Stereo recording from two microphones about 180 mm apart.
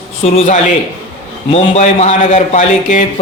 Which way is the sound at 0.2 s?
40° left (ahead or behind).